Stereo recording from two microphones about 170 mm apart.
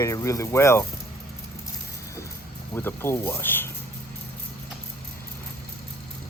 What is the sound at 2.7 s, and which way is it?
Speech, 15° left (ahead or behind).